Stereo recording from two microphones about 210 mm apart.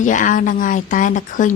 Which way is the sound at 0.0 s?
35° left (ahead or behind).